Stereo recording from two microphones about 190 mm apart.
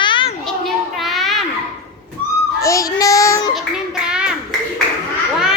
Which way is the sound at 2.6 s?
15° left (ahead or behind).